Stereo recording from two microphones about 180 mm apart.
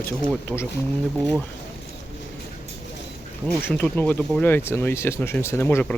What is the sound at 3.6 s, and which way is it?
Speech, 10° left (ahead or behind).